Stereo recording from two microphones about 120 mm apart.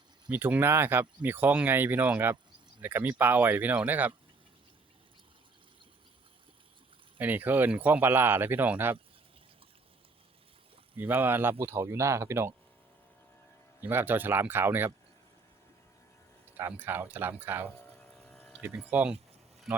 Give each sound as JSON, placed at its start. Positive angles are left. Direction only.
{"t": 0.3, "sound": "speech", "side_deg": -15}
{"t": 7.2, "sound": "speech", "side_deg": -15}
{"t": 10.9, "sound": "speech", "side_deg": -15}
{"t": 13.8, "sound": "speech", "side_deg": -15}
{"t": 16.5, "sound": "speech", "side_deg": -15}
{"t": 18.0, "sound": "a sound", "side_deg": 10}
{"t": 18.9, "sound": "speech", "side_deg": -15}